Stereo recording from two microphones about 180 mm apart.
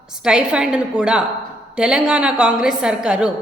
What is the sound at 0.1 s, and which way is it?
A woman's voice, 5° right (ahead or behind).